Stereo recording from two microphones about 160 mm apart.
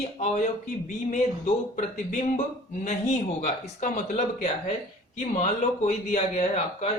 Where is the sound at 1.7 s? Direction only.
50° left (ahead or behind).